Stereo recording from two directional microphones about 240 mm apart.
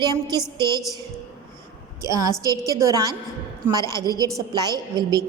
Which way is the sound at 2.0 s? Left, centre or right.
Centre.